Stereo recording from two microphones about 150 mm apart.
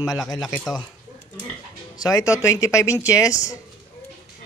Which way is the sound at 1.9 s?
25° left (ahead or behind).